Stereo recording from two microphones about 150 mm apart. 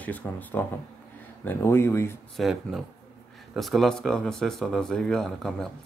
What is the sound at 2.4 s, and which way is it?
Speech, centre (ahead or behind).